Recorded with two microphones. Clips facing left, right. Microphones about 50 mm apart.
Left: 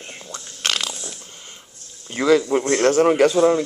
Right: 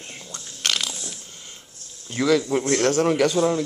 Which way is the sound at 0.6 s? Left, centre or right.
Left.